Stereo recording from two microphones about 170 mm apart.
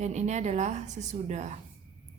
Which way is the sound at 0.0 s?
40° right (ahead or behind).